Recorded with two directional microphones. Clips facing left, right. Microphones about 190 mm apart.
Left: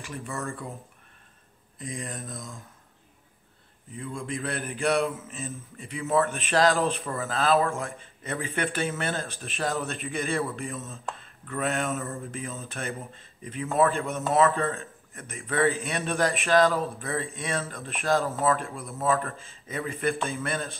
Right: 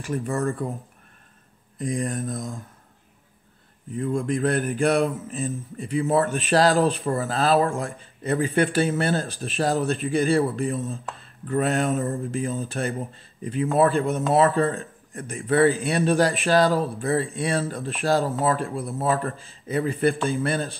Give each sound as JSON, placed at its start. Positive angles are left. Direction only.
{"t": 0.0, "sound": "speech", "side_deg": -40}
{"t": 1.8, "sound": "speech", "side_deg": -50}
{"t": 3.9, "sound": "speech", "side_deg": -45}
{"t": 5.0, "sound": "speech", "side_deg": -35}